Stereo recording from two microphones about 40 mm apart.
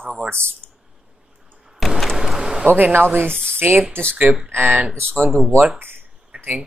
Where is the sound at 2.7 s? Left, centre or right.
Right.